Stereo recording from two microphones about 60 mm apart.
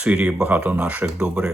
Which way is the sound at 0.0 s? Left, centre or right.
Right.